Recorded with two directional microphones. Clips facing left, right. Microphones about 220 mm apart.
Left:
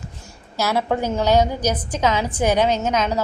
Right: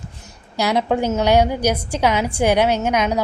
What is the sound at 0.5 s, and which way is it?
A woman's voice, 15° right (ahead or behind).